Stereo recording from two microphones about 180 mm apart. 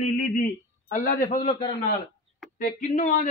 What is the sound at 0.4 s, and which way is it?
A man's voice, 50° left (ahead or behind).